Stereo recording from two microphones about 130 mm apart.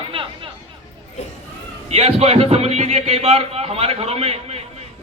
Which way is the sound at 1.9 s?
55° right (ahead or behind).